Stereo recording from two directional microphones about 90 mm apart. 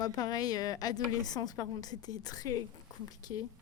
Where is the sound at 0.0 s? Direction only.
45° left (ahead or behind).